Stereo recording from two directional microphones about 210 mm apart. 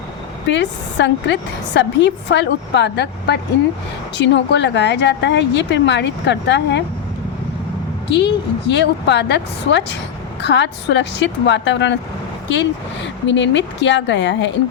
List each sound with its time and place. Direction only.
0.4 s a woman's voice: 60° left (ahead or behind)
8.1 s a woman's voice: 55° left (ahead or behind)